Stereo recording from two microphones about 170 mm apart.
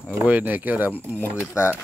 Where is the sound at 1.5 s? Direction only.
15° left (ahead or behind).